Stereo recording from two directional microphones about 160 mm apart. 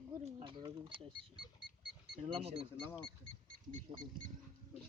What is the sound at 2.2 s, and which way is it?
Speech, 35° right (ahead or behind).